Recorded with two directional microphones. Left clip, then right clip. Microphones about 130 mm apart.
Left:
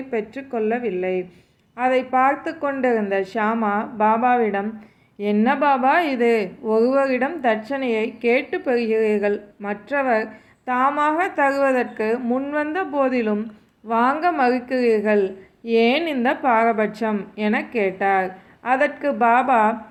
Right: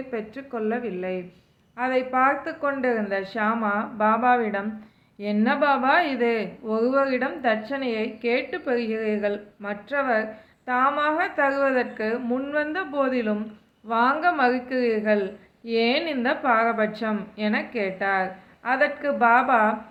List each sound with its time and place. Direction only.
0.1 s a woman's voice: 25° left (ahead or behind)